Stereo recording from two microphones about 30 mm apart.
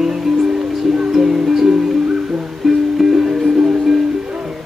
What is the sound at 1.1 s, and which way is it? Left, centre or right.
Music, centre.